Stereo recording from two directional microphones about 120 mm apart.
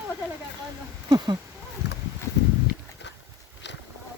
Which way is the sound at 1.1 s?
35° right (ahead or behind).